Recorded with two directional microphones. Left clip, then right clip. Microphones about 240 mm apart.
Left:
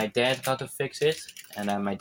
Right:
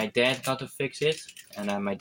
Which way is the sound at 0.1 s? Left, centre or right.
Centre.